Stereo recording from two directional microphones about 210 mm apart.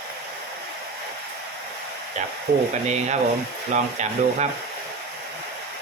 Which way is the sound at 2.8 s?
35° right (ahead or behind).